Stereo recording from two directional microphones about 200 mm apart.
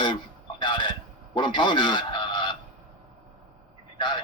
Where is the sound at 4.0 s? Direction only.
25° left (ahead or behind).